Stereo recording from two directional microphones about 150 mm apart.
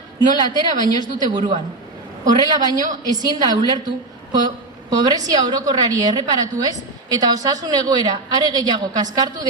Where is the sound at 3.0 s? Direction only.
25° right (ahead or behind).